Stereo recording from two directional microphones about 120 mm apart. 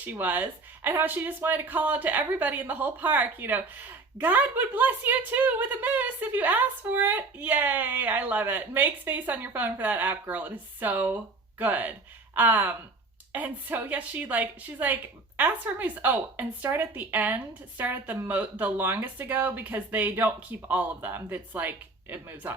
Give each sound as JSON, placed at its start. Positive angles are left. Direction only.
{"t": 0.0, "sound": "speech", "side_deg": -15}